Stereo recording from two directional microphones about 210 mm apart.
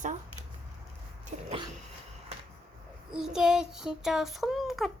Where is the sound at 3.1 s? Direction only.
5° right (ahead or behind).